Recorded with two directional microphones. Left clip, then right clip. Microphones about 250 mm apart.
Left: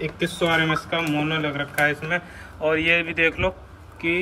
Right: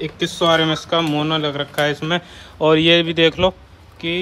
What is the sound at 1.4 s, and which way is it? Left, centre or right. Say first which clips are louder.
Speech: right 3 dB; right.